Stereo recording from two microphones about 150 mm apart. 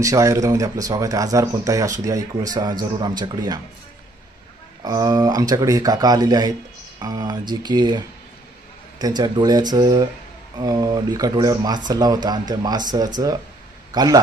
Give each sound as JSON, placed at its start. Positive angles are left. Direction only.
{"t": 0.0, "sound": "speech", "side_deg": -20}
{"t": 4.8, "sound": "speech", "side_deg": -25}